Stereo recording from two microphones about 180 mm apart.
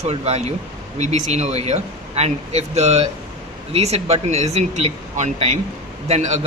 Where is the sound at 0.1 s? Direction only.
35° right (ahead or behind).